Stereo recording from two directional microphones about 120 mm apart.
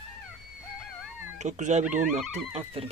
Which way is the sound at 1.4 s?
85° right.